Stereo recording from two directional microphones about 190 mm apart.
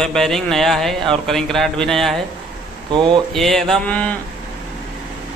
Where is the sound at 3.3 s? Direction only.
Centre (ahead or behind).